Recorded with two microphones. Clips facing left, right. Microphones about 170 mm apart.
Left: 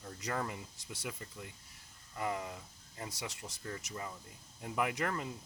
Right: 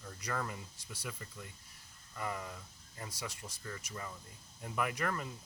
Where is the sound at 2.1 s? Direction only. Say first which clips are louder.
Left 3 dB; 20° left (ahead or behind).